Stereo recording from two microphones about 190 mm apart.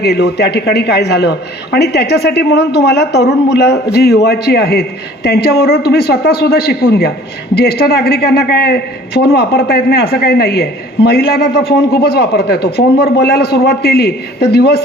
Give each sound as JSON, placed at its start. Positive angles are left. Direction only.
{"t": 0.0, "sound": "a woman's voice", "side_deg": 60}